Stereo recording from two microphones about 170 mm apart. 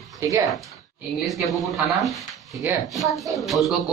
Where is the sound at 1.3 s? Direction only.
Centre (ahead or behind).